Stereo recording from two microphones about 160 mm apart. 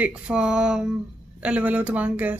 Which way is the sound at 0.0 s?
5° right (ahead or behind).